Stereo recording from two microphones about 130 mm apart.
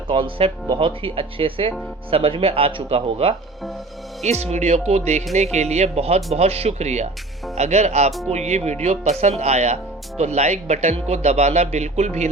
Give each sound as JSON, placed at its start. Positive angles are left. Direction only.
{"t": 0.1, "sound": "speech", "side_deg": -45}